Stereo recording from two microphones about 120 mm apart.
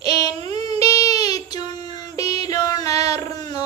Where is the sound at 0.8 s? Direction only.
55° right (ahead or behind).